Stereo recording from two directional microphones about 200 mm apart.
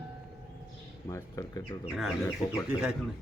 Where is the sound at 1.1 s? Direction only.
15° left (ahead or behind).